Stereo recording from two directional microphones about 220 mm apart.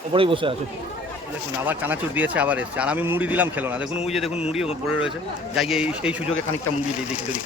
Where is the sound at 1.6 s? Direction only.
10° right (ahead or behind).